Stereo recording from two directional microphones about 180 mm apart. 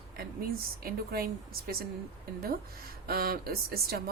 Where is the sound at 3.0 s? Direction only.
55° right (ahead or behind).